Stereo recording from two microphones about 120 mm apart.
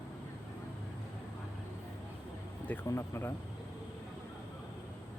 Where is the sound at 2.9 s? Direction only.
20° left (ahead or behind).